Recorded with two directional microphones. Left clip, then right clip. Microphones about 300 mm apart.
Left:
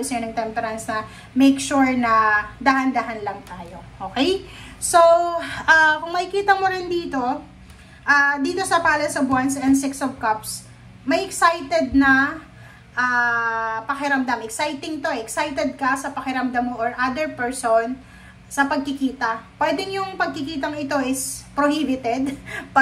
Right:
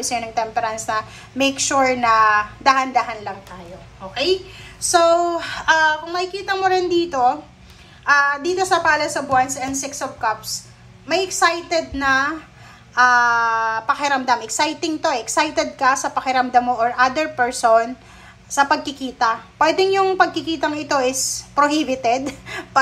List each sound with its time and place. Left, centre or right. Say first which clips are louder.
0.1 s a woman's voice: right 5 dB; centre
4.9 s a woman's voice: left 1 dB; centre